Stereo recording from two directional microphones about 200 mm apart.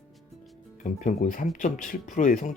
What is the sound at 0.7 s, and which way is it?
Speech, 40° left (ahead or behind).